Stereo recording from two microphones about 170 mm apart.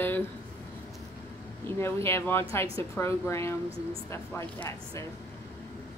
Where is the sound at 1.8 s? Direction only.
15° left (ahead or behind).